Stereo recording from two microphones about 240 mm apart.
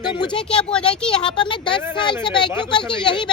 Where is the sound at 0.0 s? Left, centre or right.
Centre.